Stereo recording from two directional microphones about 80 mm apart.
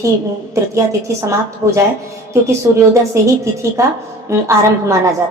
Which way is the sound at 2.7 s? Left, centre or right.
Right.